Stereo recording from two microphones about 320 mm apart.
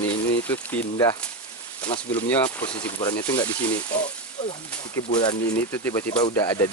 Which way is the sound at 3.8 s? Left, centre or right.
Left.